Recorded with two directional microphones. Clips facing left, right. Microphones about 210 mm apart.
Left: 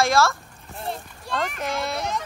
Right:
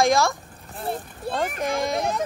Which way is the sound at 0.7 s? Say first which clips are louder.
Right 2 dB; 5° right (ahead or behind).